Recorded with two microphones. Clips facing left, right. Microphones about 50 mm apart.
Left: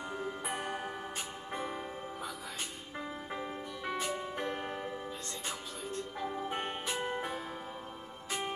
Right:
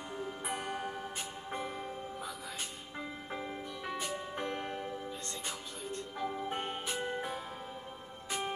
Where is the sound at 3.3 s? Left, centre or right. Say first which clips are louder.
Left 1 dB; centre.